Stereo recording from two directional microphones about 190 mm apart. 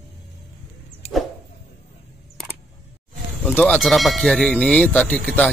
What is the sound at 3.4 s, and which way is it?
Speech, 5° left (ahead or behind).